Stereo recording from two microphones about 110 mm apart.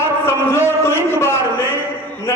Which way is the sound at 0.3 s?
25° left (ahead or behind).